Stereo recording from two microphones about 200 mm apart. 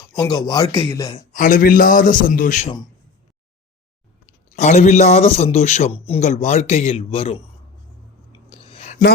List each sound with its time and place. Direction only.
0.1 s a man's voice: 20° left (ahead or behind)
1.1 s a man's voice: 40° left (ahead or behind)
4.5 s a man's voice: 35° left (ahead or behind)
8.3 s a sound: 30° left (ahead or behind)